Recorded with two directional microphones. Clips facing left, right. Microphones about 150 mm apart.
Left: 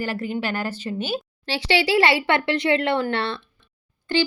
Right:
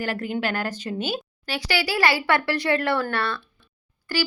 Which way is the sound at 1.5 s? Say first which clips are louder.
Left 5 dB; 25° left (ahead or behind).